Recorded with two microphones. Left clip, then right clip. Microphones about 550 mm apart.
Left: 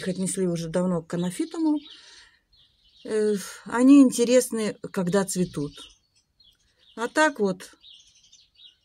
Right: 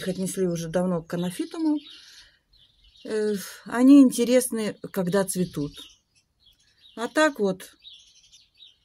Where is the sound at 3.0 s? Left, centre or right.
Right.